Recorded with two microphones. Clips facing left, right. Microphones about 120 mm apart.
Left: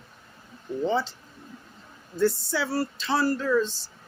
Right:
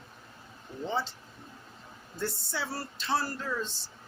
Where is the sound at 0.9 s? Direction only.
90° left.